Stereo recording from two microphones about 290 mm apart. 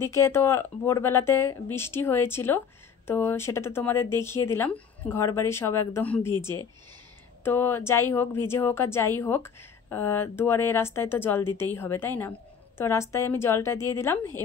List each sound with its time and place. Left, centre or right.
0.0 s speech: centre